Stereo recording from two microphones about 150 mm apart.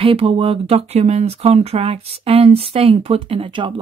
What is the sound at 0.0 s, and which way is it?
Speech, 40° right (ahead or behind).